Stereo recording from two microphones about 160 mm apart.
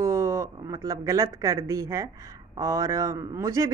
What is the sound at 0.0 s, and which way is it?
Speech, 20° right (ahead or behind).